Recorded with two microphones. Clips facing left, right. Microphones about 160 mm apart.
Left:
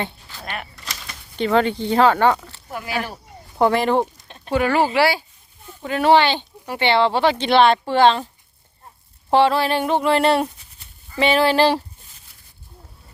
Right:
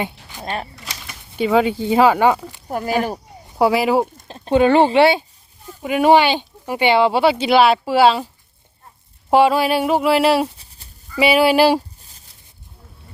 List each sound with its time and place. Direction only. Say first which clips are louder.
0.0 s speech: right 3 dB; 15° right (ahead or behind)
0.5 s a sound: right 5 dB; 30° right (ahead or behind)
1.0 s speech: right 2 dB; 10° right (ahead or behind)
2.6 s speech: right 7 dB; 45° right (ahead or behind)
3.6 s speech: right 2 dB; 5° right (ahead or behind)
4.3 s speech: right 9 dB; 30° right (ahead or behind); by 8.3 s 10° right (ahead or behind)
9.3 s speech: right 2 dB; 10° right (ahead or behind)